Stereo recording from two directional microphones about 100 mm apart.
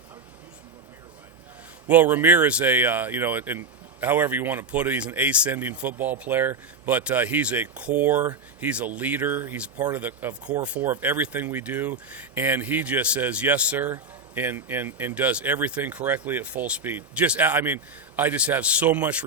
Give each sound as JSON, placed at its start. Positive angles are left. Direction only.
{"t": 1.9, "sound": "speech", "side_deg": -20}